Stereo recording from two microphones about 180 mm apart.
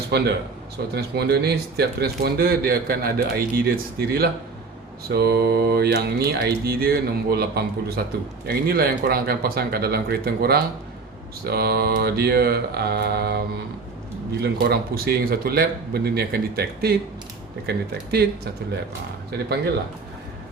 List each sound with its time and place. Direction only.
0.1 s speech: 60° right (ahead or behind)
14.4 s speech: 60° right (ahead or behind)